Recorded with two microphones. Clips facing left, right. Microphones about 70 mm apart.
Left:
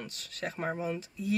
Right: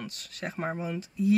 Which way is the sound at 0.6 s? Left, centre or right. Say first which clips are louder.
Right 2 dB; centre.